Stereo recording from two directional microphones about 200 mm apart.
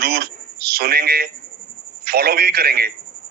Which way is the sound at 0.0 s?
50° right (ahead or behind).